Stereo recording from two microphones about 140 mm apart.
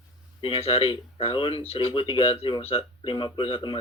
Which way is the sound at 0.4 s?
40° left (ahead or behind).